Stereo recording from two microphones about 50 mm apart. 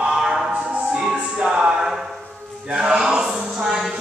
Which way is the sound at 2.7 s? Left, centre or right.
Centre.